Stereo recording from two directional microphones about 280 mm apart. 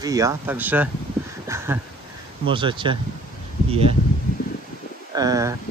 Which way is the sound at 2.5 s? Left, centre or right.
Centre.